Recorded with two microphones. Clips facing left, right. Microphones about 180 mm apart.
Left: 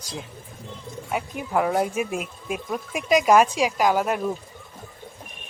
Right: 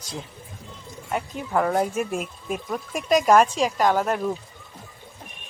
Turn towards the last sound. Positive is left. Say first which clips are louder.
# even
turn(degrees=5)  # may be behind; listen again after turning